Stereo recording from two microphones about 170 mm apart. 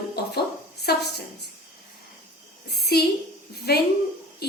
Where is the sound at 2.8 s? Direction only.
70° left (ahead or behind).